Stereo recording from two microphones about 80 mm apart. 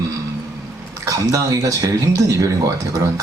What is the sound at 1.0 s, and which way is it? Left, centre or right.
Speech, right.